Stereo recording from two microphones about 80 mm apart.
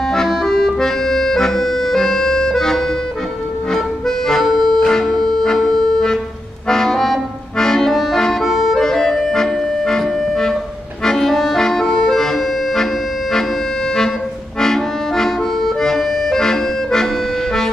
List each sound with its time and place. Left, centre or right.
0.1 s accordion: centre
4.3 s music: centre
6.7 s accordion: centre
14.6 s accordion: centre